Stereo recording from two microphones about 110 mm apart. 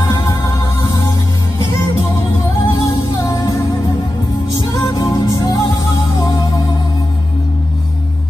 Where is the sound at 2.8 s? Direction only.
30° left (ahead or behind).